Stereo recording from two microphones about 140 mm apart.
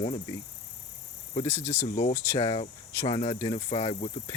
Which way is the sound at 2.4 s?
40° left (ahead or behind).